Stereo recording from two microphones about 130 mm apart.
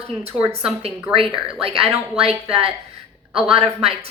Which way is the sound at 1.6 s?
45° right (ahead or behind).